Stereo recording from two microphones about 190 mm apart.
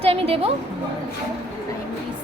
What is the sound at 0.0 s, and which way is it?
Speech, 30° right (ahead or behind).